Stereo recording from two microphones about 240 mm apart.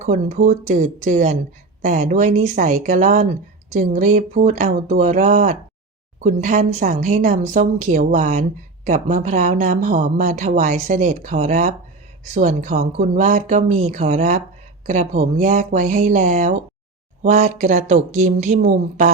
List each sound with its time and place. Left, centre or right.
0.0 s a woman's voice: right